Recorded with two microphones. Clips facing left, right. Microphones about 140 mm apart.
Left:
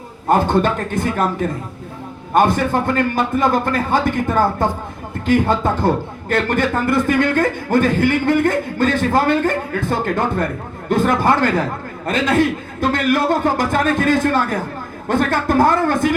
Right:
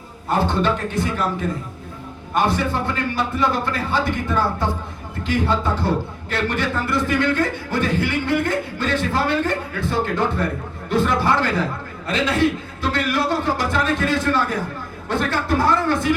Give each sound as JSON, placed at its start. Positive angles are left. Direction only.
{"t": 0.3, "sound": "speech", "side_deg": 50}